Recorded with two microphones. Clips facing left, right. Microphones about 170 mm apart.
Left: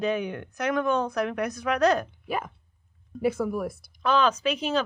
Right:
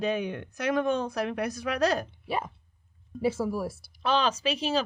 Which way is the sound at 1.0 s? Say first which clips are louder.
Left 2 dB; 30° right (ahead or behind).